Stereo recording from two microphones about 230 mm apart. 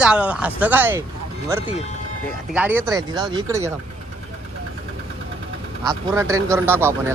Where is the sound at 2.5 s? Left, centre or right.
Centre.